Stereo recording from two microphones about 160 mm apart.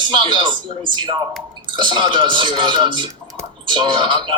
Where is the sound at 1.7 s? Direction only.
30° right (ahead or behind).